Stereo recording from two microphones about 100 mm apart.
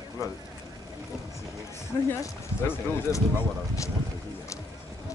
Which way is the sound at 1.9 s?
30° left (ahead or behind).